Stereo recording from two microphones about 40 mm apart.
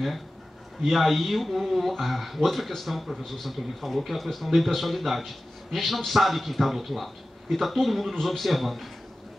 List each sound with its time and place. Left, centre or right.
0.8 s speech: centre